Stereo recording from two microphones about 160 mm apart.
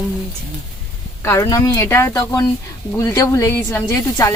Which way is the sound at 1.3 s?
20° left (ahead or behind).